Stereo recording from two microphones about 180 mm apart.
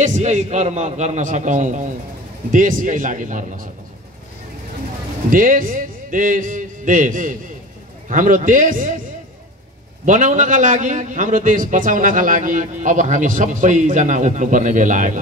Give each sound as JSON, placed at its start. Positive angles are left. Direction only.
{"t": 0.0, "sound": "a man's voice", "side_deg": -40}
{"t": 5.3, "sound": "a man's voice", "side_deg": -50}
{"t": 10.0, "sound": "a man's voice", "side_deg": -45}